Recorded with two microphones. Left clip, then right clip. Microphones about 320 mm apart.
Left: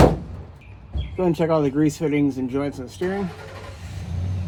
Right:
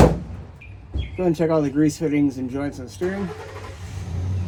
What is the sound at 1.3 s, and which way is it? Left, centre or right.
Speech, centre.